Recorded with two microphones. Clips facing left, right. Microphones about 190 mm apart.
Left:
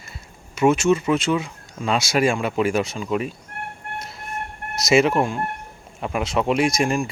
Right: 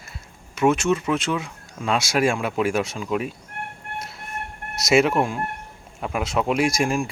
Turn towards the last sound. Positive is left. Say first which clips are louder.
# left 1 dB
turn(degrees=0)  # may be behind; listen again after turning